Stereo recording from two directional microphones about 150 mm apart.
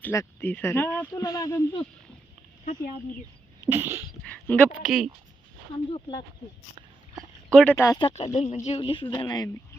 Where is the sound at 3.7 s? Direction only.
15° right (ahead or behind).